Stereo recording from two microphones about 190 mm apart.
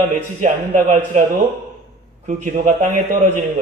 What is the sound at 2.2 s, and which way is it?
A man's voice, 40° right (ahead or behind).